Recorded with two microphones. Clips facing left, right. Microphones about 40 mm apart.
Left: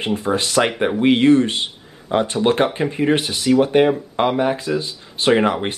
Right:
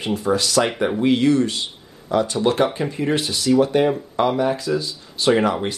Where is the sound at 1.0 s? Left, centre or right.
Left.